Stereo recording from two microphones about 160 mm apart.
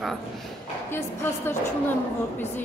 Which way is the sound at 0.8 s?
15° left (ahead or behind).